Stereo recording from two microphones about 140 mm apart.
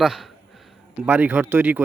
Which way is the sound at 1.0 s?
10° right (ahead or behind).